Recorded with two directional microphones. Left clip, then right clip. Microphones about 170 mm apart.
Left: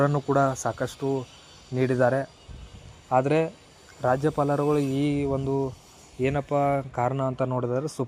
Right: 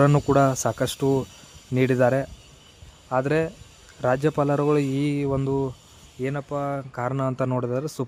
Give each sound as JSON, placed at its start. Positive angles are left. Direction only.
{"t": 0.0, "sound": "speech", "side_deg": -35}
{"t": 3.1, "sound": "speech", "side_deg": -15}
{"t": 4.0, "sound": "a man's voice", "side_deg": -30}
{"t": 6.2, "sound": "speech", "side_deg": 0}
{"t": 7.1, "sound": "a man's voice", "side_deg": -20}